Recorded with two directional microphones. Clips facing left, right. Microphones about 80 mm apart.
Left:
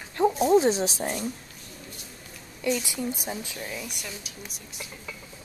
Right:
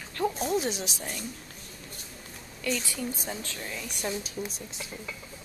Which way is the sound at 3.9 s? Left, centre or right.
Right.